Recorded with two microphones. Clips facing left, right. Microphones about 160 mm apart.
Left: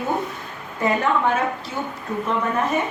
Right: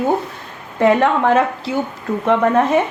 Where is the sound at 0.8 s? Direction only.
75° right (ahead or behind).